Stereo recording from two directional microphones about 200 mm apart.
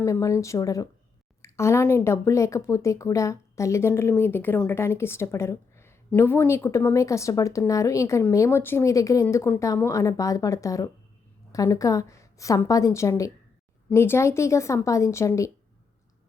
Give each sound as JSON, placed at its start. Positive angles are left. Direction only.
{"t": 0.0, "sound": "speech", "side_deg": 15}